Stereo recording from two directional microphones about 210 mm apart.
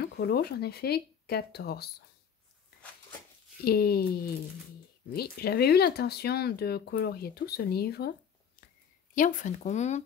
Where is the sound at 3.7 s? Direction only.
45° left (ahead or behind).